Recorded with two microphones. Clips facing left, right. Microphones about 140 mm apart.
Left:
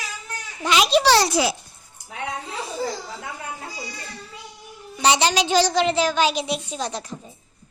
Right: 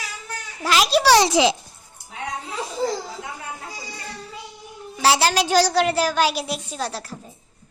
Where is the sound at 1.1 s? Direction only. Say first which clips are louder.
Right 3 dB; 20° right (ahead or behind).